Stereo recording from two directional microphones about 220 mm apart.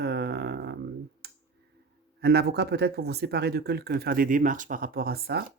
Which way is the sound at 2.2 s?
45° right (ahead or behind).